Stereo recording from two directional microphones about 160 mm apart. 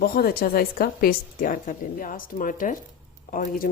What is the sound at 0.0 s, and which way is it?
Speech, 70° left (ahead or behind).